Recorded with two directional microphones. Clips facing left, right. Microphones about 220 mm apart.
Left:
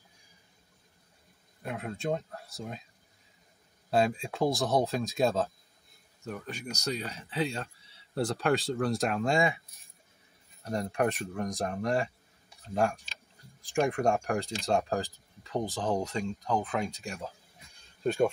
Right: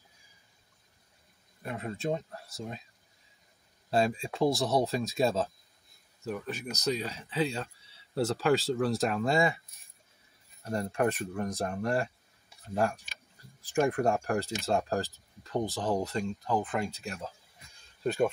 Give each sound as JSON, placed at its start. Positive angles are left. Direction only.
{"t": 1.6, "sound": "speech", "side_deg": 0}
{"t": 3.9, "sound": "speech", "side_deg": 0}
{"t": 10.7, "sound": "speech", "side_deg": 0}